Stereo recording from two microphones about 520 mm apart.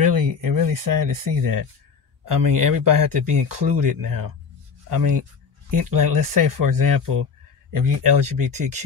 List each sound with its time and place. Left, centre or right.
0.0 s speech: right